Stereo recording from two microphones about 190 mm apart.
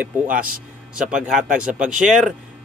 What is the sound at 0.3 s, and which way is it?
Speech, 45° right (ahead or behind).